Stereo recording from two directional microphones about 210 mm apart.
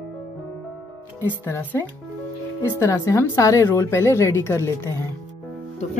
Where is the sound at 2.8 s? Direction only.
15° left (ahead or behind).